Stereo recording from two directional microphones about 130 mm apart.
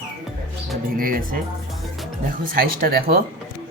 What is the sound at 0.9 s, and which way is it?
Speech, 90° right.